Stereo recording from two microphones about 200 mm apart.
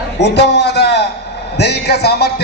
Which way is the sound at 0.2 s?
55° left (ahead or behind).